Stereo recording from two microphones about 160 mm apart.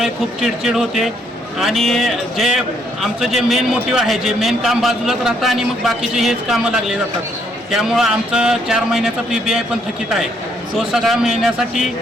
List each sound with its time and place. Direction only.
0.0 s a man's voice: centre (ahead or behind)
10.8 s a man's voice: centre (ahead or behind)